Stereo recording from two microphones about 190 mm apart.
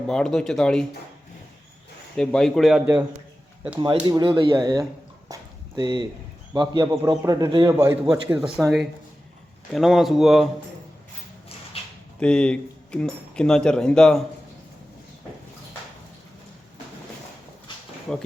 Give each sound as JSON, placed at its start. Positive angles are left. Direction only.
{"t": 0.1, "sound": "speech", "side_deg": 5}
{"t": 2.1, "sound": "speech", "side_deg": 5}
{"t": 4.0, "sound": "a man's voice", "side_deg": -25}
{"t": 5.3, "sound": "dog", "side_deg": -20}
{"t": 6.5, "sound": "a man's voice", "side_deg": -20}
{"t": 11.8, "sound": "a sound", "side_deg": 30}
{"t": 12.2, "sound": "speech", "side_deg": 5}
{"t": 18.1, "sound": "speech", "side_deg": 0}